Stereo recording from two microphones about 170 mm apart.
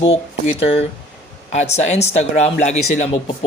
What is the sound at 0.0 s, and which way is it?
Speech, 35° left (ahead or behind).